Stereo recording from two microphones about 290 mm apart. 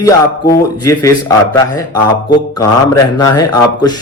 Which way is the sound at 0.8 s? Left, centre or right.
Centre.